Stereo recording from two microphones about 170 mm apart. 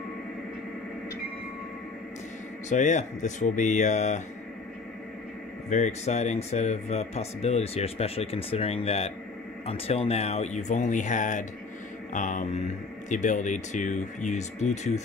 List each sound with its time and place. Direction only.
2.7 s speech: 45° left (ahead or behind)
5.7 s speech: 45° left (ahead or behind)